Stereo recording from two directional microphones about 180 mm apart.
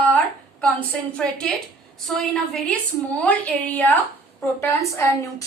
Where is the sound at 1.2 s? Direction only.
5° left (ahead or behind).